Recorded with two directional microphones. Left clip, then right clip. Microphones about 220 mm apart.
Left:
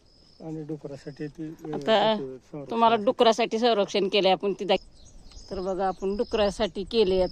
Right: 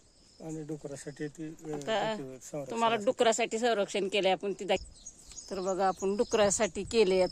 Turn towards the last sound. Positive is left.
turn(degrees=-15)  # may be behind; listen again after turning